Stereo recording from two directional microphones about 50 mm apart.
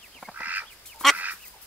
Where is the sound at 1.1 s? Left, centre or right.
Right.